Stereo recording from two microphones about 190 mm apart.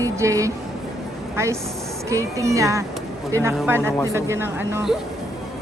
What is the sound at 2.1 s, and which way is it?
Speech, 15° right (ahead or behind).